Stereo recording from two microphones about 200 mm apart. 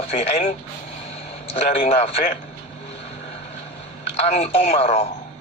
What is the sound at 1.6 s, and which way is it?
Speech, 35° left (ahead or behind).